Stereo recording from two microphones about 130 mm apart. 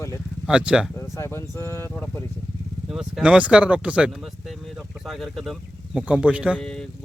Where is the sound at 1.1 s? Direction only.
20° left (ahead or behind).